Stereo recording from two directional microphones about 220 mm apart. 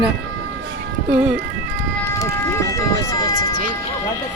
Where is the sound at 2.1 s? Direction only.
15° left (ahead or behind).